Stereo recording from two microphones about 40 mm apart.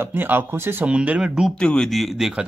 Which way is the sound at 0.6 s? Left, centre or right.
Right.